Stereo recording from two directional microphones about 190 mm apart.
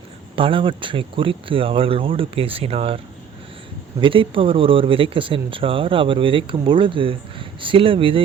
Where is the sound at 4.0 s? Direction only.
25° right (ahead or behind).